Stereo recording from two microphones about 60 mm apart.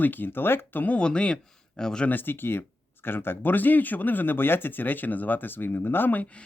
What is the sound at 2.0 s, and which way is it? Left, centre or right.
Speech, left.